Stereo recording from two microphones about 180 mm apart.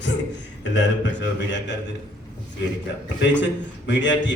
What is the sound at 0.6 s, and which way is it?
A man's voice, 90° left.